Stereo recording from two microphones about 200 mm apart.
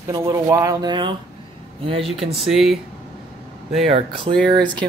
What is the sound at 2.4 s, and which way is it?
Speech, centre (ahead or behind).